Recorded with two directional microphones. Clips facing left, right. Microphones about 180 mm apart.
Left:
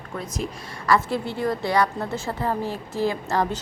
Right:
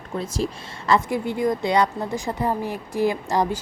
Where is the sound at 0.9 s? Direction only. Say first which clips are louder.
Right 1 dB; 15° right (ahead or behind).